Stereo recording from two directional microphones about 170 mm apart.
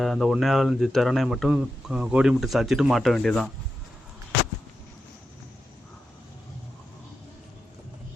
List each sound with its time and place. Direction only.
0.0 s speech: centre (ahead or behind)